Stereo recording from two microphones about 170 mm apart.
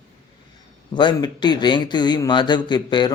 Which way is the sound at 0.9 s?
25° left (ahead or behind).